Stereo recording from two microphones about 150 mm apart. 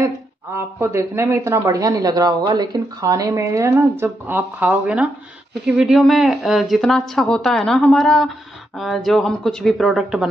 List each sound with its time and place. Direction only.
0.0 s a woman's voice: 15° right (ahead or behind); by 10.2 s centre (ahead or behind)